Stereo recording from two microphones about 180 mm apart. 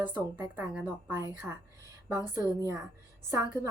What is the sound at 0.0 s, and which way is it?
A woman's voice, 10° right (ahead or behind).